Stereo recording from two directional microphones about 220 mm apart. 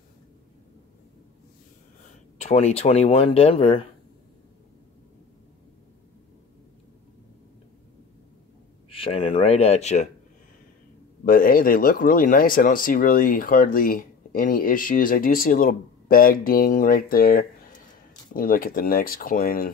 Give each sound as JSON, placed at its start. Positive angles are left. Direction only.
{"t": 2.4, "sound": "speech", "side_deg": 30}
{"t": 8.9, "sound": "speech", "side_deg": 25}
{"t": 11.2, "sound": "speech", "side_deg": 40}